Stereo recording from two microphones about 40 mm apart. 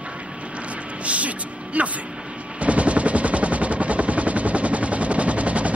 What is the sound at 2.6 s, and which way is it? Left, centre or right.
Machine gun, right.